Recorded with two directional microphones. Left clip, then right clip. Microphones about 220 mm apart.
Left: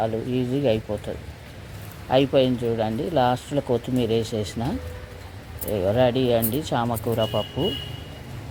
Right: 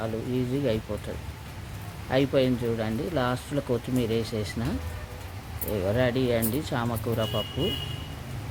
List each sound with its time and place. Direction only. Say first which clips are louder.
0.0 s speech: left 5 dB; 10° left (ahead or behind)
2.0 s speech: left 5 dB; 10° left (ahead or behind)
5.7 s speech: left 5 dB; 10° left (ahead or behind)